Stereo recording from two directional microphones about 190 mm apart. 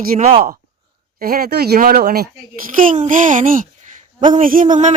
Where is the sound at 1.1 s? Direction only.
50° right (ahead or behind).